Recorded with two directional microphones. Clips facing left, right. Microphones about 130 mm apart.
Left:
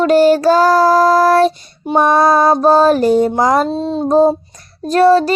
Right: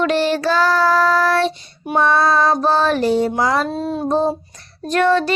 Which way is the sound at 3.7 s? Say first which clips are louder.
Left 5 dB; 25° left (ahead or behind).